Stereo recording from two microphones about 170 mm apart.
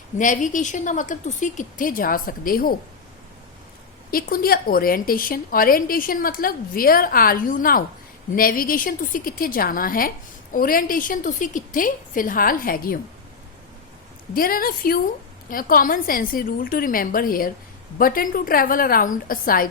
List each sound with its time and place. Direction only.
0.2 s a woman's voice: 50° left (ahead or behind)
4.1 s a woman's voice: 60° left (ahead or behind)
14.3 s a woman's voice: 60° left (ahead or behind)